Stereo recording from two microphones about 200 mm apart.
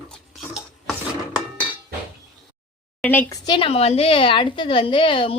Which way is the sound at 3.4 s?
25° left (ahead or behind).